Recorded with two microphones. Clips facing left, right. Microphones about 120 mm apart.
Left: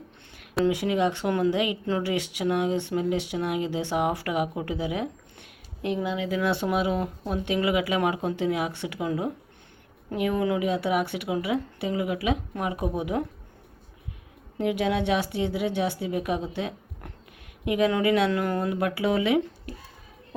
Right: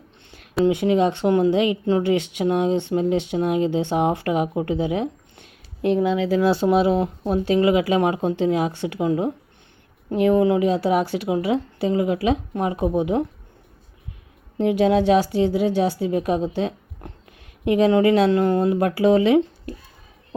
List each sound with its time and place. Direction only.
0.6 s a woman's voice: 30° right (ahead or behind)
6.2 s a woman's voice: 30° right (ahead or behind)
14.6 s a woman's voice: 30° right (ahead or behind)